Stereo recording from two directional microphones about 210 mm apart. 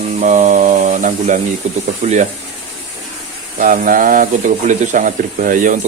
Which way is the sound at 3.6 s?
40° right (ahead or behind).